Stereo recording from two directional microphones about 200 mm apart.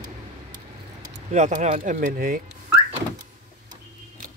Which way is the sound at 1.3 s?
35° right (ahead or behind).